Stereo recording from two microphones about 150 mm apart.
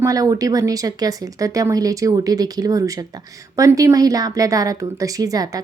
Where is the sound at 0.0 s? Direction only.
25° right (ahead or behind).